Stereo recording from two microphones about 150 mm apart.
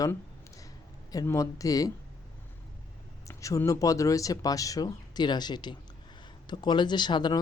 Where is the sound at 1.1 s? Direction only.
20° left (ahead or behind).